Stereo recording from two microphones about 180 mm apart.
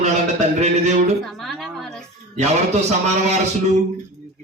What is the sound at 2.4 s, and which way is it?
Speech, 40° right (ahead or behind).